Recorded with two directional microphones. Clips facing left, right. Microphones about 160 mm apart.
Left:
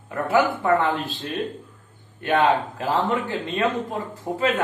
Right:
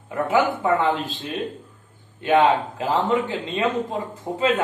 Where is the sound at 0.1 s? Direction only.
20° right (ahead or behind).